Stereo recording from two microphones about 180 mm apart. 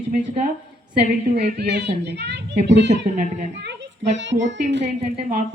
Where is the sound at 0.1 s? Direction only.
40° right (ahead or behind).